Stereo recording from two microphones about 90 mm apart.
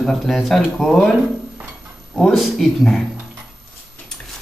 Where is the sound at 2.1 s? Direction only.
Centre (ahead or behind).